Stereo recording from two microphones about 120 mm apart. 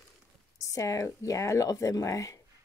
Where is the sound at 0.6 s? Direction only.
25° left (ahead or behind).